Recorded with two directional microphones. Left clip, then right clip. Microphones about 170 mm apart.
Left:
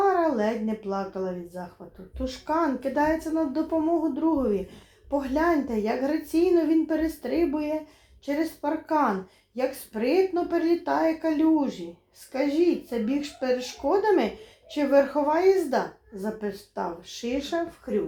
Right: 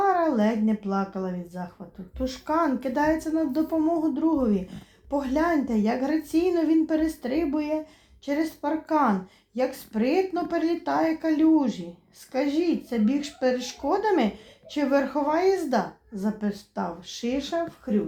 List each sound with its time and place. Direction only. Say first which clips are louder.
0.0 s a child's voice: even; 35° right (ahead or behind)